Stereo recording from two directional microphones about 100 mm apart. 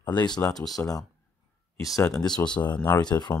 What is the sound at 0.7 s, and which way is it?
Speech, 35° left (ahead or behind).